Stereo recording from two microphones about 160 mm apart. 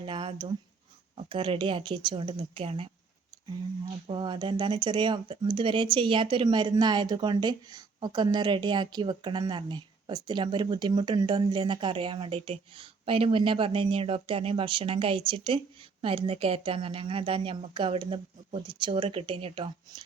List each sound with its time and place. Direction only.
0.0 s a sound: 35° right (ahead or behind)
1.1 s speech: 35° right (ahead or behind)
4.0 s speech: 30° right (ahead or behind)